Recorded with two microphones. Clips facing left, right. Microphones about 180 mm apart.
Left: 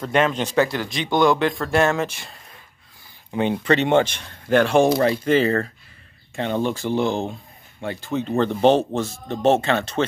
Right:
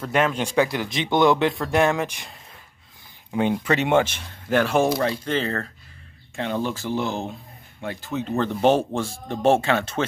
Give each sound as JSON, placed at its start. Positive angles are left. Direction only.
{"t": 0.0, "sound": "speech", "side_deg": -5}
{"t": 5.1, "sound": "speech", "side_deg": 10}
{"t": 6.3, "sound": "speech", "side_deg": 0}